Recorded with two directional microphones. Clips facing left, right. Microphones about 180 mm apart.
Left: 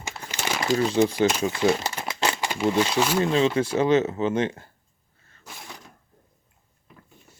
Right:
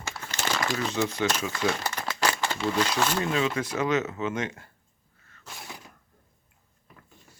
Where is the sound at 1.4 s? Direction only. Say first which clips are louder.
Left 6 dB; 25° left (ahead or behind).